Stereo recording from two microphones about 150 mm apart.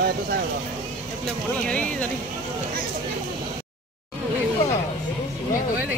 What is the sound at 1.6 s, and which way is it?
Music, 10° left (ahead or behind).